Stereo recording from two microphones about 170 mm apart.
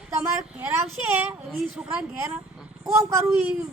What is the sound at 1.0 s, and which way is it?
A woman's voice, 10° right (ahead or behind).